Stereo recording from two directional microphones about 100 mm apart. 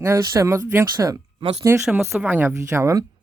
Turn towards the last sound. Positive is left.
turn(degrees=-35)  # may be behind; listen again after turning